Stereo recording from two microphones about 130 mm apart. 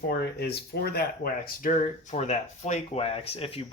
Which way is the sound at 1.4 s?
90° left.